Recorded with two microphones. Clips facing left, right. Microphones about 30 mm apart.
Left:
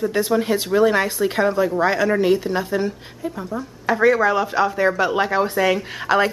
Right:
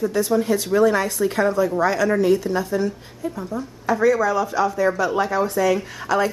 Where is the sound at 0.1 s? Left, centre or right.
Left.